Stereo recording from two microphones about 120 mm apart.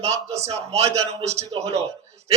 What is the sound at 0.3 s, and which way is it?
Speech, 65° right (ahead or behind).